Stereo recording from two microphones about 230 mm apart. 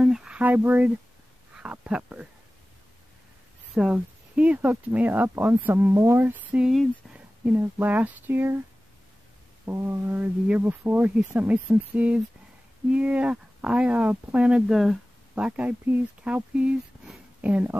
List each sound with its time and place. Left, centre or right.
0.0 s a sound: centre
3.7 s speech: centre
9.7 s speech: centre